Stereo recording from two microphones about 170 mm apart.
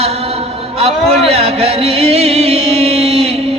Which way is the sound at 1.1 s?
35° right (ahead or behind).